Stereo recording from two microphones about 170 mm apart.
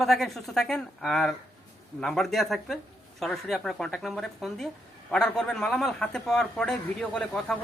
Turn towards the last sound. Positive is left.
turn(degrees=5)  # may be behind; listen again after turning